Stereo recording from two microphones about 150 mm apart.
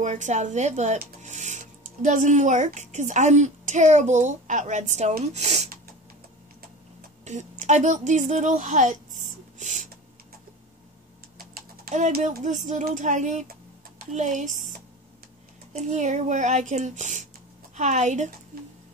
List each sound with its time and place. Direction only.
0.0 s speech: 50° right (ahead or behind)
7.2 s a woman's voice: 55° right (ahead or behind)
11.9 s speech: 55° right (ahead or behind)
15.7 s speech: 55° right (ahead or behind)